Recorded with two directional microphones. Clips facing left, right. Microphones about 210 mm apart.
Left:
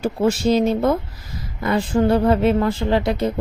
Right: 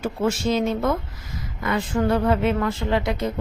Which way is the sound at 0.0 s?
35° left (ahead or behind).